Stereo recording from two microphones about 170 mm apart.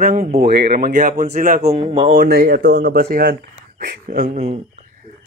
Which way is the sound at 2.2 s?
70° right (ahead or behind).